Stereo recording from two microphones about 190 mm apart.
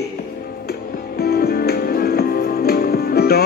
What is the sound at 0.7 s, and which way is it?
Music, 55° left (ahead or behind).